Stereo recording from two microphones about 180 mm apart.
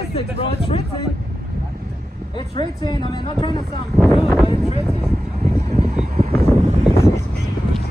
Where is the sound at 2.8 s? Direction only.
25° left (ahead or behind).